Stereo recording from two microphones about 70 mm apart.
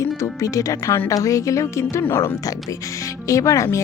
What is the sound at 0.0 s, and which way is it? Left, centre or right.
A woman's voice, left.